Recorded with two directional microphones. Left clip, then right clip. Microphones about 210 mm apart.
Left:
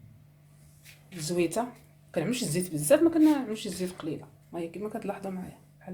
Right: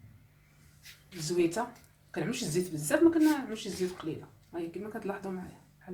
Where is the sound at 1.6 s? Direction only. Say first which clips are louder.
Left 3 dB; 40° left (ahead or behind).